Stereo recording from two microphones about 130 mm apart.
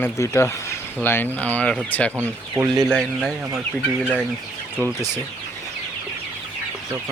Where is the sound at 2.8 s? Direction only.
5° left (ahead or behind).